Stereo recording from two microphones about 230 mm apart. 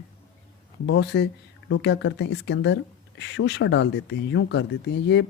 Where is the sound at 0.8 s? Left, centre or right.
Left.